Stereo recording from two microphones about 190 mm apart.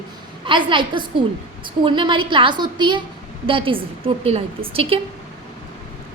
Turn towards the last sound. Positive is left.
turn(degrees=-30)  # may be behind; listen again after turning